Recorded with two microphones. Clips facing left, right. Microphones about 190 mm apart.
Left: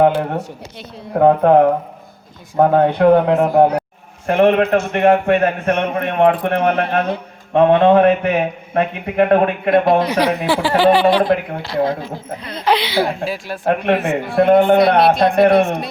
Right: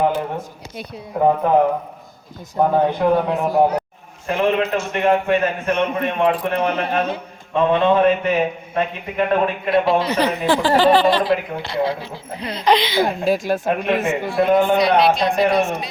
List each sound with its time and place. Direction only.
0.0 s speech: 65° left (ahead or behind)
2.6 s speech: 65° left (ahead or behind)
4.3 s a man's voice: 60° left (ahead or behind)
10.1 s speech: 10° left (ahead or behind)
11.2 s speech: 50° left (ahead or behind)
12.6 s speech: 10° left (ahead or behind)
13.1 s speech: 45° right (ahead or behind)
14.3 s a man's voice: 55° left (ahead or behind)